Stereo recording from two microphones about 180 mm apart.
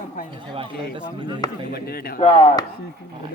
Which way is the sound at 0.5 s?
30° right (ahead or behind).